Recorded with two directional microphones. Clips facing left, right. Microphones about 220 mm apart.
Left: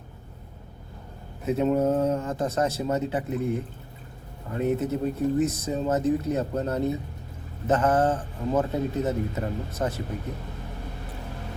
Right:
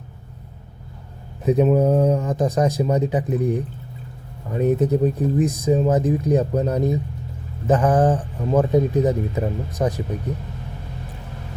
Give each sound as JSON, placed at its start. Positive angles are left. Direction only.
{"t": 1.5, "sound": "speech", "side_deg": -15}